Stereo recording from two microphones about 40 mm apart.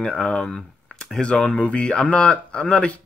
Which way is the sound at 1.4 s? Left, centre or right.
Left.